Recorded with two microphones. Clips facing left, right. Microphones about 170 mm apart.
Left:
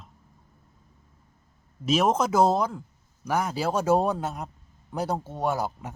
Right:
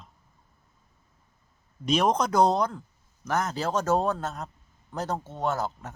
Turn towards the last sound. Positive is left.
turn(degrees=10)  # may be behind; listen again after turning